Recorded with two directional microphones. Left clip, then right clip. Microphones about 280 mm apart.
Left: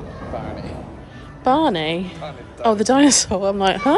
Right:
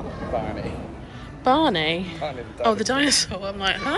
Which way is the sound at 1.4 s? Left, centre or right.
Centre.